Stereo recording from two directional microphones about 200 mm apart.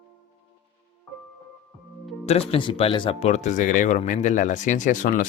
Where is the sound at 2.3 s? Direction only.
30° left (ahead or behind).